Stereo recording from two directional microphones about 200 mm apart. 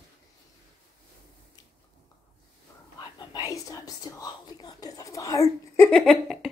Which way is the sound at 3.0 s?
20° left (ahead or behind).